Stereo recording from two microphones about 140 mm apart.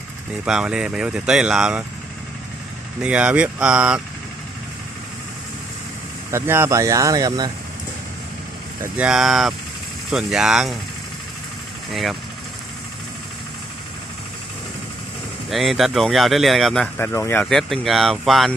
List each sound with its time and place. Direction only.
0.4 s speech: 5° right (ahead or behind)
3.0 s speech: 10° right (ahead or behind)
6.3 s speech: 20° right (ahead or behind)
8.8 s speech: 10° right (ahead or behind)
15.4 s speech: centre (ahead or behind)
17.0 s speech: 15° left (ahead or behind)
17.4 s speech: 5° left (ahead or behind)